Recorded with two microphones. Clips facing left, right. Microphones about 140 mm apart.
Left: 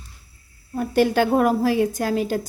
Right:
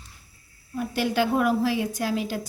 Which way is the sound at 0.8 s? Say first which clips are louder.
Left 6 dB; 50° left (ahead or behind).